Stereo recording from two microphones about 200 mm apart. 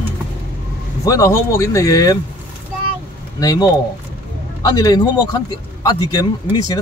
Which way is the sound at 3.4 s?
20° left (ahead or behind).